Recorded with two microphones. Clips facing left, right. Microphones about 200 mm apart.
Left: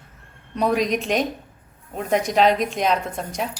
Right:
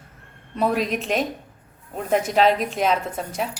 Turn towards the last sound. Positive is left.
turn(degrees=-5)  # may be behind; listen again after turning